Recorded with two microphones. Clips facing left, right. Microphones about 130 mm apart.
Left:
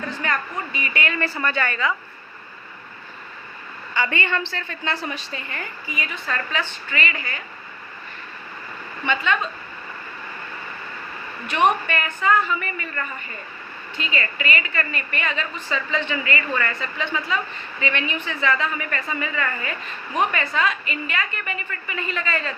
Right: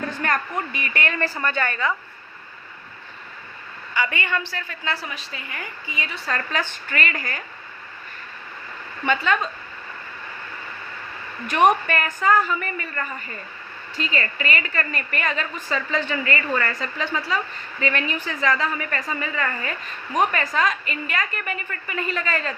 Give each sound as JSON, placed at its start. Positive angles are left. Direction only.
{"t": 0.2, "sound": "a woman's voice", "side_deg": -50}
{"t": 3.9, "sound": "a woman's voice", "side_deg": -15}
{"t": 5.9, "sound": "a woman's voice", "side_deg": -30}
{"t": 9.0, "sound": "a woman's voice", "side_deg": -40}
{"t": 11.9, "sound": "a woman's voice", "side_deg": -40}